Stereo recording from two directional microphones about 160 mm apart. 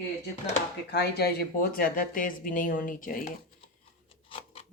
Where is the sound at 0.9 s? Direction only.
90° left; by 3.3 s 60° left (ahead or behind).